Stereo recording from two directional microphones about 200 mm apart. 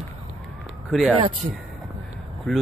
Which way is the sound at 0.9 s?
Centre (ahead or behind).